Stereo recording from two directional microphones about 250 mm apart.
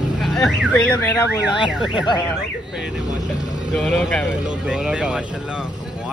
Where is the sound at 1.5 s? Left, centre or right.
Centre.